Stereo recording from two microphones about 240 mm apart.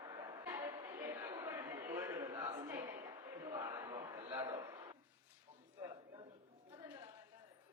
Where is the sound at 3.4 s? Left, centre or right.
Centre.